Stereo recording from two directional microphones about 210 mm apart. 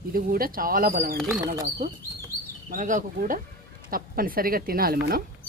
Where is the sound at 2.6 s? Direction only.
40° right (ahead or behind).